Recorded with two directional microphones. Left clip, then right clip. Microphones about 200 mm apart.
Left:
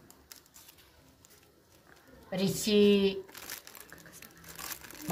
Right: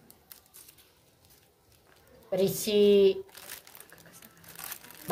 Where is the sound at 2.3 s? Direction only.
35° right (ahead or behind).